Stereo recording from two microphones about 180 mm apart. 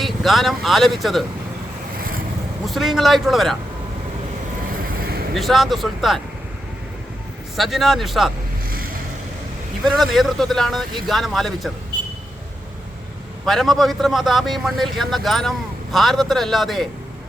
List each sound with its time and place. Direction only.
0.0 s speech: centre (ahead or behind)
2.6 s a man's voice: centre (ahead or behind)
5.3 s a man's voice: centre (ahead or behind)
7.5 s a man's voice: centre (ahead or behind)
8.7 s boat: 55° right (ahead or behind)
9.8 s a man's voice: centre (ahead or behind)
13.4 s a man's voice: centre (ahead or behind)